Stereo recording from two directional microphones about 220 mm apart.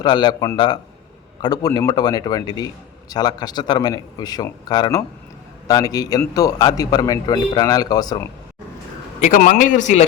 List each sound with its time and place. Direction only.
0.0 s a man's voice: 20° left (ahead or behind)
9.2 s a man's voice: 35° left (ahead or behind)